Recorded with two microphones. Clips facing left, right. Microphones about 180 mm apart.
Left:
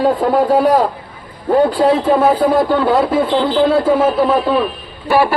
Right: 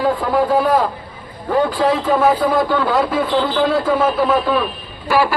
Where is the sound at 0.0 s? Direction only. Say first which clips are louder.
Left 3 dB; 35° left (ahead or behind).